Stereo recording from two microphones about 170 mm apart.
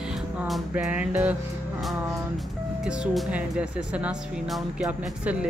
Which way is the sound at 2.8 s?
5° right (ahead or behind).